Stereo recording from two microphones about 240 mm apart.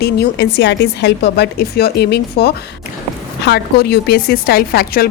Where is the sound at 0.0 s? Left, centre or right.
Left.